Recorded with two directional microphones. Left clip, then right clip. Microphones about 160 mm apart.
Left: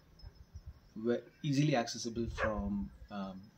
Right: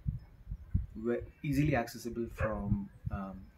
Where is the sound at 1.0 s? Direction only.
10° left (ahead or behind).